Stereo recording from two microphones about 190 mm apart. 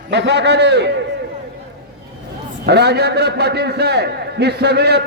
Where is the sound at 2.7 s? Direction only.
60° right (ahead or behind).